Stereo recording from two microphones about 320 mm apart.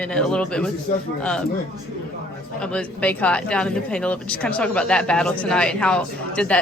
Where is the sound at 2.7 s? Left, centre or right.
Centre.